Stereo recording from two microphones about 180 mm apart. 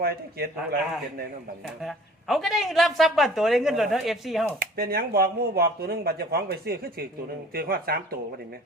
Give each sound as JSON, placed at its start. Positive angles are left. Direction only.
{"t": 0.0, "sound": "speech", "side_deg": -60}
{"t": 1.6, "sound": "speech", "side_deg": 0}
{"t": 4.6, "sound": "speech", "side_deg": -60}